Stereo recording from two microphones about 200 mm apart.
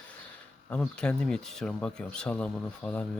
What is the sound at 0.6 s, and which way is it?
Speech, 5° left (ahead or behind).